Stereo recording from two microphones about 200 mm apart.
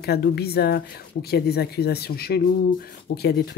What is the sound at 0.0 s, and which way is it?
Speech, 50° left (ahead or behind).